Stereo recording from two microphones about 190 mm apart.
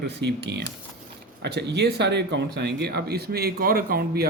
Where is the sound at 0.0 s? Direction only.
60° right (ahead or behind).